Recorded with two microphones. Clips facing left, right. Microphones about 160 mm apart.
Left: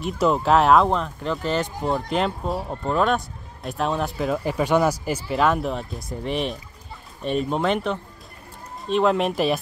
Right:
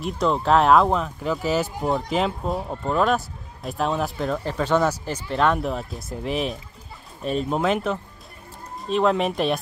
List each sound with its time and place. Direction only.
0.0 s speech: 5° left (ahead or behind)
4.5 s speech: 10° left (ahead or behind)